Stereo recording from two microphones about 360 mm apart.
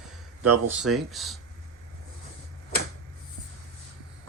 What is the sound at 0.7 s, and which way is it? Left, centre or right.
Speech, centre.